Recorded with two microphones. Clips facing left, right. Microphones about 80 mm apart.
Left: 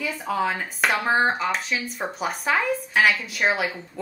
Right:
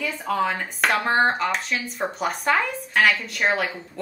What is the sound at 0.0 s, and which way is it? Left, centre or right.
Speech, centre.